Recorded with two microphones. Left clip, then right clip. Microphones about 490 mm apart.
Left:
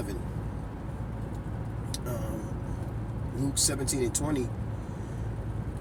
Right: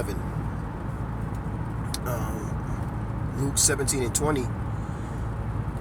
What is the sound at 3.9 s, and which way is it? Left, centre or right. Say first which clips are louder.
Speech: right 4 dB; left.